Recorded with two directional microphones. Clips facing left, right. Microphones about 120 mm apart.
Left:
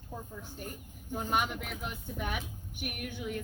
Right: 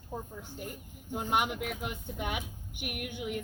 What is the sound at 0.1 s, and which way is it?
A woman's voice, 20° right (ahead or behind).